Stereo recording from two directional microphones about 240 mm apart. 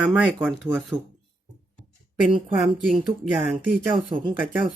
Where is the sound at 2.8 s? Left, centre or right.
Centre.